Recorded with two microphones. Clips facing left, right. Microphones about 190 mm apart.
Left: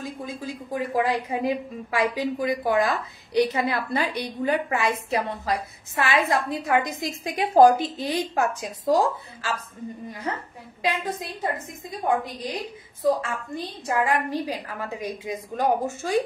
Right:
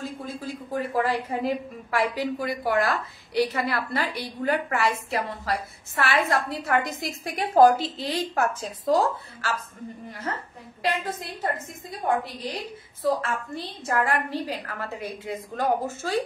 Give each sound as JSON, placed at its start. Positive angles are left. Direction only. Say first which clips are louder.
{"t": 0.0, "sound": "a woman's voice", "louder": "even", "side_deg": 15}
{"t": 10.8, "sound": "a woman's voice", "louder": "left 1 dB", "side_deg": 15}
{"t": 13.2, "sound": "a woman's voice", "louder": "even", "side_deg": 15}